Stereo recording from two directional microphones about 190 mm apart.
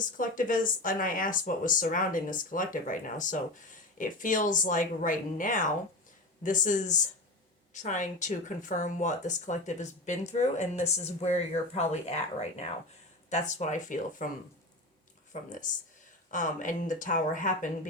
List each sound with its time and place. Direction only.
0.0 s speech: 45° left (ahead or behind)
15.3 s speech: 40° left (ahead or behind)